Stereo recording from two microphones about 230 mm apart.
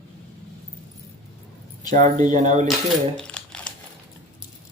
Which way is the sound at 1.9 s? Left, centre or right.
Right.